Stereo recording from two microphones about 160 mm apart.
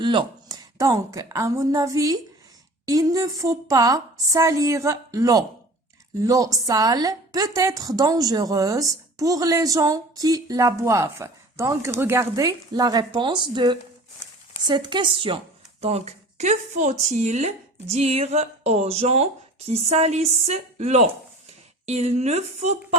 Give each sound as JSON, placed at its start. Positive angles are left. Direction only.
{"t": 0.0, "sound": "a woman's voice", "side_deg": -30}